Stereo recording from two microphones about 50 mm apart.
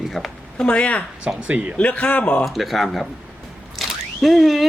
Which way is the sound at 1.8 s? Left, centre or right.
Left.